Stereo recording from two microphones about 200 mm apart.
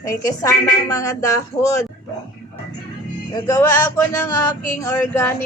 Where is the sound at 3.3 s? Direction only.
15° left (ahead or behind).